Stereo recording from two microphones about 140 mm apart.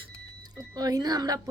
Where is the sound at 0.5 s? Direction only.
25° right (ahead or behind).